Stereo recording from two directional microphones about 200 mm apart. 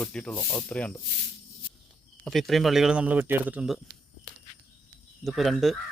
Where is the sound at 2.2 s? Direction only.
Centre (ahead or behind).